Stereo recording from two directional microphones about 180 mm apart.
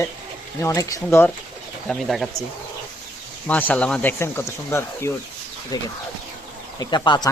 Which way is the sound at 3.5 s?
10° left (ahead or behind).